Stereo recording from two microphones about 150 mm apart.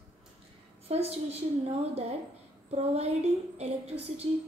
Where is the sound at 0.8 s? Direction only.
45° right (ahead or behind).